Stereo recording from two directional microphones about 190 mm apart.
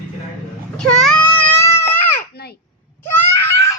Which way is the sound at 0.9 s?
5° left (ahead or behind).